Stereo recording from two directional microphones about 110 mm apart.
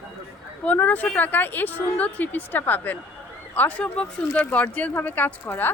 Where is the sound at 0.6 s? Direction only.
15° left (ahead or behind).